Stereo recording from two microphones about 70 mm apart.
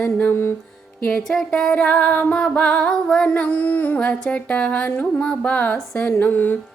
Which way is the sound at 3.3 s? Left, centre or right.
Left.